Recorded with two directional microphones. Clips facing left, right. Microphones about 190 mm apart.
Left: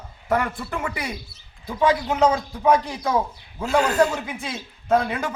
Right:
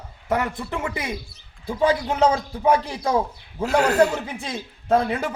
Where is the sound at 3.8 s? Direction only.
65° right (ahead or behind).